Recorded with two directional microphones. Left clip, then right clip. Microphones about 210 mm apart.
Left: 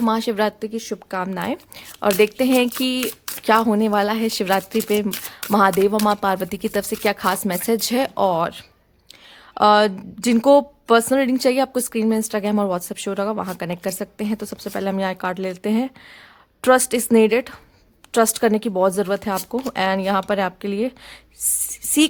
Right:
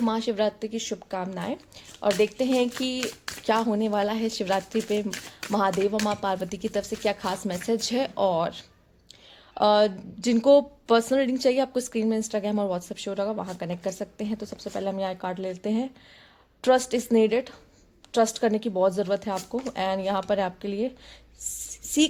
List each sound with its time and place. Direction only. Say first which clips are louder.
0.0 s a woman's voice: left 5 dB; 25° left (ahead or behind)